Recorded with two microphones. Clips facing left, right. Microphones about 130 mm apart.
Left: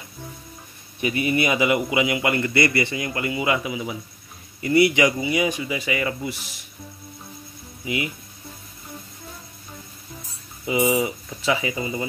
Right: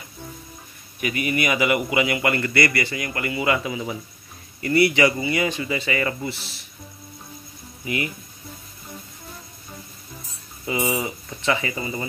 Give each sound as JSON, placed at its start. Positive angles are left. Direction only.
{"t": 1.0, "sound": "a man's voice", "side_deg": 25}
{"t": 7.8, "sound": "speech", "side_deg": 15}
{"t": 10.6, "sound": "speech", "side_deg": 15}